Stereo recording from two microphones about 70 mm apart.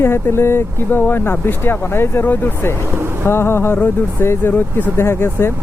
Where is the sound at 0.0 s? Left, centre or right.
Left.